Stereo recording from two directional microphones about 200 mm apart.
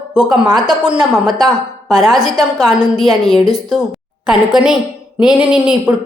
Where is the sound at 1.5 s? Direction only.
Centre (ahead or behind).